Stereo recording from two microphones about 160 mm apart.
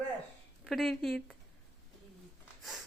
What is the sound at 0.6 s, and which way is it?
Speech, centre (ahead or behind).